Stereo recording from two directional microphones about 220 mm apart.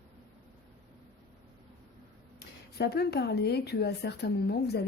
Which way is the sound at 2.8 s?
45° left (ahead or behind).